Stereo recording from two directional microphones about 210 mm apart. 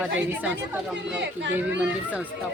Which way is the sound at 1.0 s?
55° right (ahead or behind).